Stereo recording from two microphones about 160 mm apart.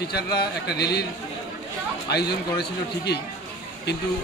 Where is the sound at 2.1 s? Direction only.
90° left.